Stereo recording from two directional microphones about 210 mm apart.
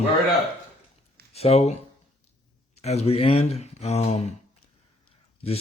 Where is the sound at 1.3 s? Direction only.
30° left (ahead or behind).